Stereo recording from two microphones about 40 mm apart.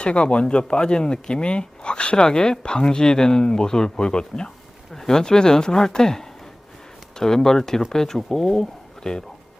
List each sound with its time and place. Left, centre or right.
0.0 s speech: left